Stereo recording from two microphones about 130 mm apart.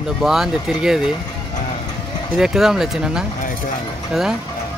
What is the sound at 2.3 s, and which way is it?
Speech, 5° right (ahead or behind).